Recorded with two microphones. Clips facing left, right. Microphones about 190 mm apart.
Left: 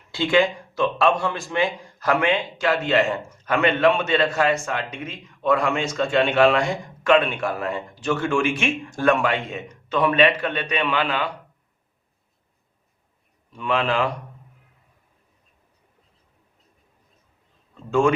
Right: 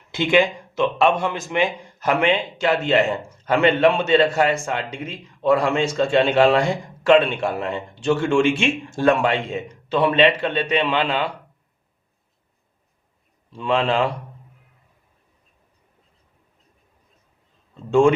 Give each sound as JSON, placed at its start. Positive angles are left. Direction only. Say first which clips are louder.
{"t": 0.1, "sound": "speech", "louder": "right 1 dB", "side_deg": -20}
{"t": 13.5, "sound": "speech", "louder": "right 3 dB", "side_deg": -30}